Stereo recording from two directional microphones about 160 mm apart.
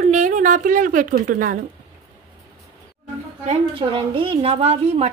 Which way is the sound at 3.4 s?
35° right (ahead or behind).